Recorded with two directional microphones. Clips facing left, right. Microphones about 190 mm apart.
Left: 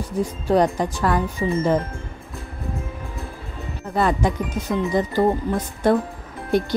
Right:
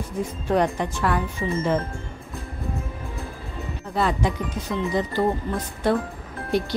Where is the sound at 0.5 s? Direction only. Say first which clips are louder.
Left 3 dB; 35° left (ahead or behind).